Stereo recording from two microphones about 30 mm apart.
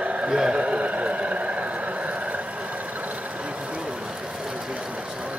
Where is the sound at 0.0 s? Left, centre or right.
Right.